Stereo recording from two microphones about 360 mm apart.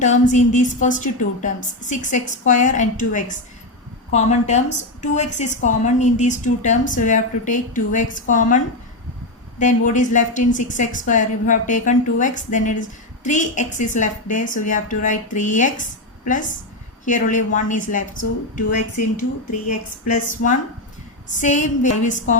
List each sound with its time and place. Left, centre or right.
0.0 s a woman's voice: left